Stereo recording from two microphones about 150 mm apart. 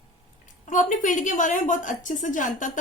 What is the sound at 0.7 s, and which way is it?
A woman's voice, 60° left (ahead or behind).